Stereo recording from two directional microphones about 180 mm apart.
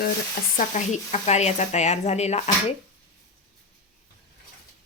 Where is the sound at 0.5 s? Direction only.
40° left (ahead or behind).